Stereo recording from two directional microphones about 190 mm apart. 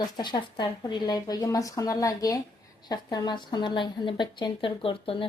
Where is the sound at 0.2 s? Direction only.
25° left (ahead or behind).